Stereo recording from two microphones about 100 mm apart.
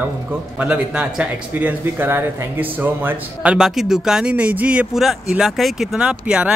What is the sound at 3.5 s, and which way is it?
Speech, 5° right (ahead or behind).